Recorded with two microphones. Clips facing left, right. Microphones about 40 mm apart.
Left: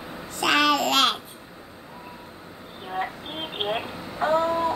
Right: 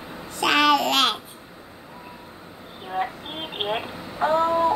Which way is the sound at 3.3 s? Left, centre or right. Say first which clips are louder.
Right 1 dB; centre.